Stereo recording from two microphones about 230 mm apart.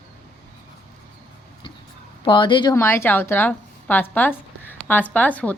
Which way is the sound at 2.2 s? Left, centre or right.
Left.